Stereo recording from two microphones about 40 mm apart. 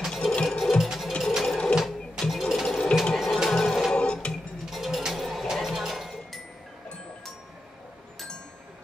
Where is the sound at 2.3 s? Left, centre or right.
Centre.